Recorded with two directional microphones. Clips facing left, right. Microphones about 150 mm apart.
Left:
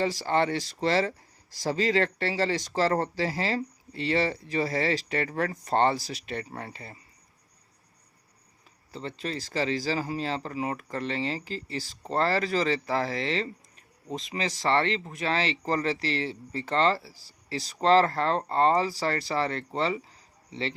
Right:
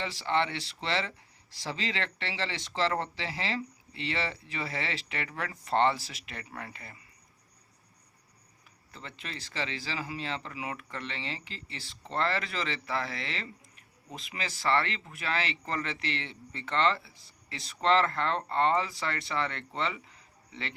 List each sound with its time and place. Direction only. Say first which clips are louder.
0.0 s speech: left 5 dB; 40° left (ahead or behind)
8.9 s speech: left 10 dB; 30° left (ahead or behind)